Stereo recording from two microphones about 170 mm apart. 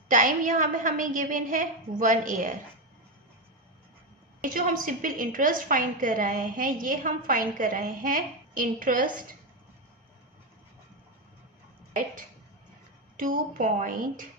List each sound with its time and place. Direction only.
0.1 s a woman's voice: 50° right (ahead or behind)
4.4 s a woman's voice: 55° right (ahead or behind)
13.1 s a woman's voice: 55° right (ahead or behind)